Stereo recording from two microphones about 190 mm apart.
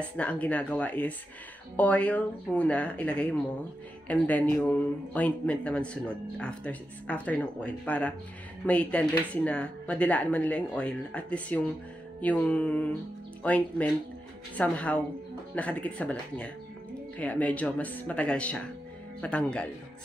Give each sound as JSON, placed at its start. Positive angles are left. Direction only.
{"t": 0.0, "sound": "speech", "side_deg": 5}